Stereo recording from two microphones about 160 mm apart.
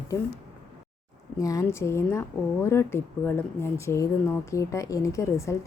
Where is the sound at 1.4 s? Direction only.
20° left (ahead or behind).